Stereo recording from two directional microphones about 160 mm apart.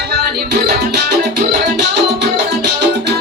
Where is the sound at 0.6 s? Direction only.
90° right.